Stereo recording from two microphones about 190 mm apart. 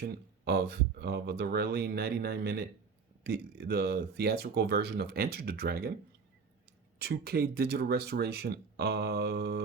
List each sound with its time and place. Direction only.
0.0 s speech: 60° right (ahead or behind)
7.0 s speech: 55° right (ahead or behind)